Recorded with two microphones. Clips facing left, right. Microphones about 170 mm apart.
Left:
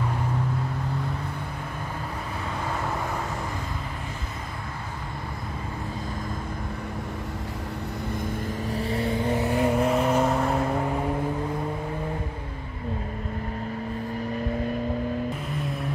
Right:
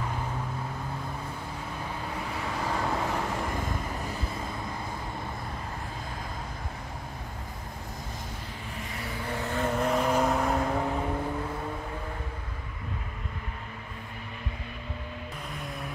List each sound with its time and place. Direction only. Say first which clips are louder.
8.7 s vehicle: left 12 dB; 30° left (ahead or behind)
9.3 s vehicle: left 4 dB; 15° left (ahead or behind)